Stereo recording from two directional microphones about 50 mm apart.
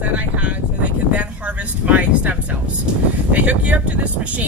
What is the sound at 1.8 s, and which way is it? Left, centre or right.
Speech, right.